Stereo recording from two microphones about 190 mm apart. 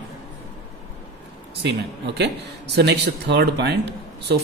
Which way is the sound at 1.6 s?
60° right (ahead or behind).